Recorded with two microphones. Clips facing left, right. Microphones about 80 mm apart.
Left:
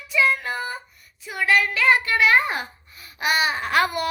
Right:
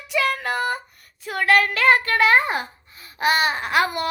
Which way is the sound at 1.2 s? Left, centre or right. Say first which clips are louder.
Right 2 dB; right.